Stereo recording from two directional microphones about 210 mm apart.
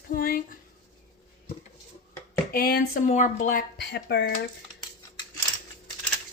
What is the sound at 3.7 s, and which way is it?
Speech, 50° left (ahead or behind).